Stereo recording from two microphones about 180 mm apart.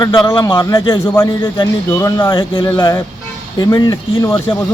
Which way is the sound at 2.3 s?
25° left (ahead or behind).